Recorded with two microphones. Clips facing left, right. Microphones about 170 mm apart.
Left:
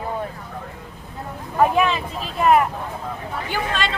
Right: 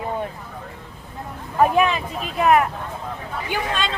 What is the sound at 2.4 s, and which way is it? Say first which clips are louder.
Speech: even; 5° right (ahead or behind).